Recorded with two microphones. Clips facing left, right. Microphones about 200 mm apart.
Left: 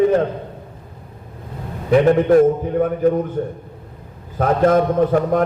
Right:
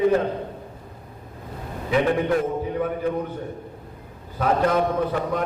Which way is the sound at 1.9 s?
45° left (ahead or behind).